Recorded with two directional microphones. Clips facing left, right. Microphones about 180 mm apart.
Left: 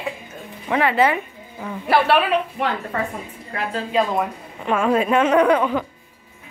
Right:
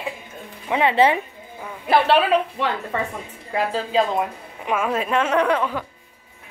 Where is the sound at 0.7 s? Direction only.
25° right (ahead or behind).